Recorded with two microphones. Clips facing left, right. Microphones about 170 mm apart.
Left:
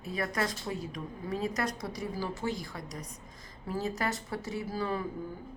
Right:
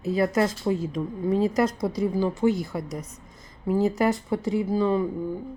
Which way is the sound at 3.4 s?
20° right (ahead or behind).